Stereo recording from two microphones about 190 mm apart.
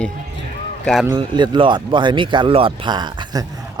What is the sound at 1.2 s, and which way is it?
Speech, 25° right (ahead or behind).